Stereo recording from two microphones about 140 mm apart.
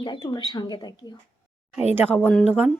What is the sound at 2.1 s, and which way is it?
Speech, 5° left (ahead or behind).